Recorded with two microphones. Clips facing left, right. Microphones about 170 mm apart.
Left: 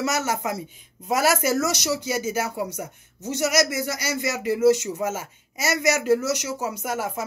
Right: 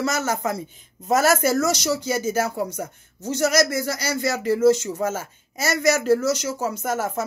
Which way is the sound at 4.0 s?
35° right (ahead or behind).